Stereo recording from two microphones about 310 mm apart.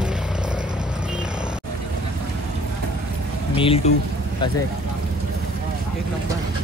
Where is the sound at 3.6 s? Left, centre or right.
Centre.